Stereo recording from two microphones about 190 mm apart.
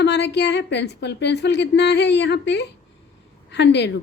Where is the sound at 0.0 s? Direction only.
60° left (ahead or behind).